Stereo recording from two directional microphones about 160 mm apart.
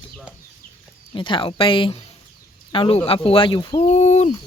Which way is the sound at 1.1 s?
30° left (ahead or behind).